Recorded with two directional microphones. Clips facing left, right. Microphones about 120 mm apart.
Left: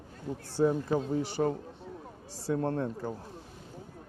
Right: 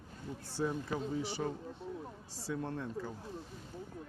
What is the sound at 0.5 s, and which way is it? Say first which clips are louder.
A man's voice: left 9 dB; 50° left (ahead or behind).